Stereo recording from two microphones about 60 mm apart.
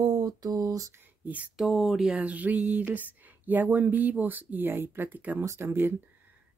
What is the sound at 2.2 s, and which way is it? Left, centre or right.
Speech, right.